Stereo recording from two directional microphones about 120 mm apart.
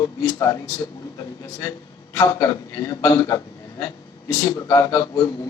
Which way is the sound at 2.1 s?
30° left (ahead or behind).